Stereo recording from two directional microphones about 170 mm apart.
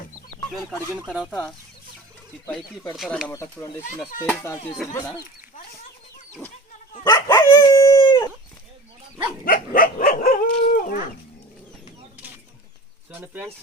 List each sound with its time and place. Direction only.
1.1 s speech: centre (ahead or behind)
3.2 s speech: 15° left (ahead or behind)
7.0 s dog: 15° left (ahead or behind)
9.4 s dog: 55° left (ahead or behind)
13.1 s speech: 10° right (ahead or behind)